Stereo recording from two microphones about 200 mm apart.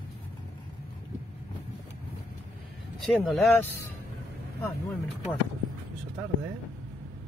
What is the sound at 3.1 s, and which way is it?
Speech, centre (ahead or behind).